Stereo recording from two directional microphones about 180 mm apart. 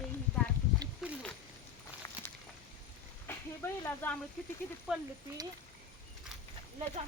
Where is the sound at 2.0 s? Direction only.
15° left (ahead or behind).